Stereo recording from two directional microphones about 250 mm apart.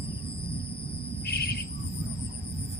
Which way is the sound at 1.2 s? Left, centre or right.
Left.